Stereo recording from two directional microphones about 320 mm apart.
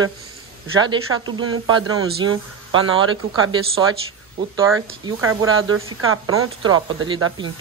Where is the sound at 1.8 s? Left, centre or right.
Right.